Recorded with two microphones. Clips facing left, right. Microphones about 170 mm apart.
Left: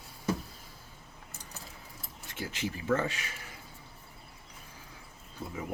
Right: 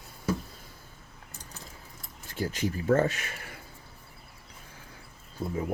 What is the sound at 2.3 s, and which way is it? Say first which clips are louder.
Speech: right 6 dB; 40° right (ahead or behind).